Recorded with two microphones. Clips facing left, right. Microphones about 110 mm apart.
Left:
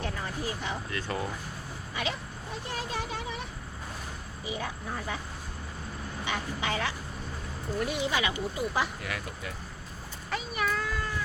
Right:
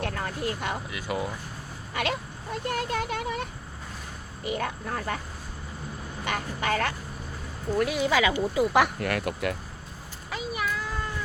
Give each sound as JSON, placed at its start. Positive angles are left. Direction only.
{"t": 0.0, "sound": "a sound", "side_deg": -60}
{"t": 0.9, "sound": "speech", "side_deg": -10}
{"t": 1.9, "sound": "vehicle", "side_deg": -65}
{"t": 4.4, "sound": "speech", "side_deg": -65}
{"t": 6.2, "sound": "speech", "side_deg": -55}
{"t": 7.8, "sound": "speech", "side_deg": -85}
{"t": 10.3, "sound": "speech", "side_deg": -5}